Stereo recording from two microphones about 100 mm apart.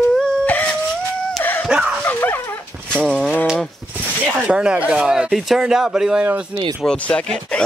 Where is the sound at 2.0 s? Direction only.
20° left (ahead or behind).